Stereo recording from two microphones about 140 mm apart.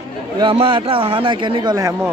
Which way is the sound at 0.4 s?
35° right (ahead or behind).